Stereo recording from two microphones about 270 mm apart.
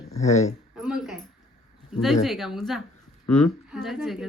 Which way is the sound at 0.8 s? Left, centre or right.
Centre.